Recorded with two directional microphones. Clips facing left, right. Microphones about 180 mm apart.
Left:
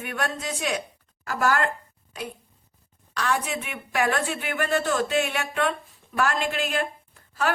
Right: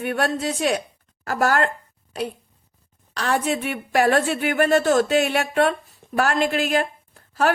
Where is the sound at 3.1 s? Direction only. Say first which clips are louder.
Right 4 dB; 35° right (ahead or behind).